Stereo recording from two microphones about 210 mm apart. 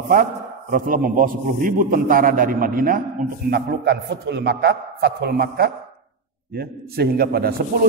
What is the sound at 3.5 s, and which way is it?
A man's voice, 55° right (ahead or behind).